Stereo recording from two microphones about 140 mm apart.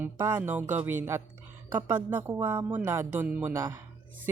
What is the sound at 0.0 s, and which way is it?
A woman's voice, 15° right (ahead or behind).